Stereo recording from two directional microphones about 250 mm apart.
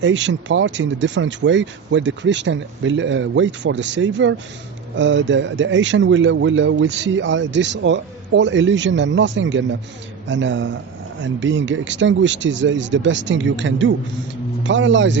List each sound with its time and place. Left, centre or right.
0.0 s a man's voice: right